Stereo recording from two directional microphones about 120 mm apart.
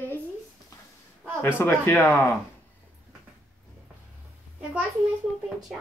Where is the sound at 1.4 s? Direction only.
20° left (ahead or behind).